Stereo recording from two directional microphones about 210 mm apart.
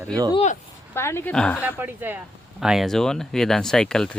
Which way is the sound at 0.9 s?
10° left (ahead or behind).